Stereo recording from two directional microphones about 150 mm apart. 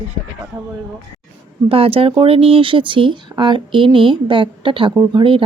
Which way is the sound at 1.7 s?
40° right (ahead or behind).